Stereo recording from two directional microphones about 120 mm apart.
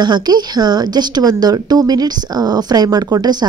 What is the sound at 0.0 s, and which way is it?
Speech, 35° right (ahead or behind).